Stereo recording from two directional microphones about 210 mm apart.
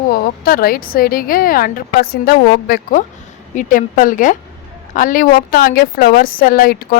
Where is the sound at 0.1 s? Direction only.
45° left (ahead or behind).